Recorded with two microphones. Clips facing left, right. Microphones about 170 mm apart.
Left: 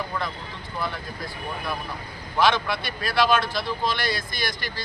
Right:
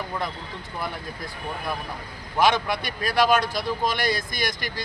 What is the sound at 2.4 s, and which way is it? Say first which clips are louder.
Speech: right 1 dB; 45° right (ahead or behind).